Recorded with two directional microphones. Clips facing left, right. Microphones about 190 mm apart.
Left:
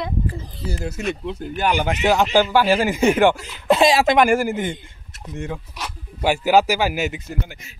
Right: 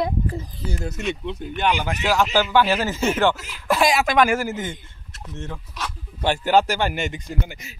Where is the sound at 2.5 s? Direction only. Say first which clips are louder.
Left 2 dB; 10° left (ahead or behind); by 4.2 s 25° left (ahead or behind).